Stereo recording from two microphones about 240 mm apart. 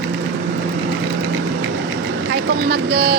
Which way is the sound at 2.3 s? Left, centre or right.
Right.